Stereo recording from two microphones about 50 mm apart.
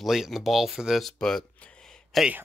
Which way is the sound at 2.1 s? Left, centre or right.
Centre.